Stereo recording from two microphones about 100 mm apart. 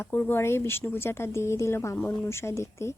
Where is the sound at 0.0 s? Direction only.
20° left (ahead or behind).